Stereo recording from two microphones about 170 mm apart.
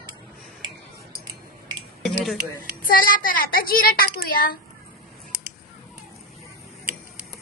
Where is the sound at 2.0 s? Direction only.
Centre (ahead or behind).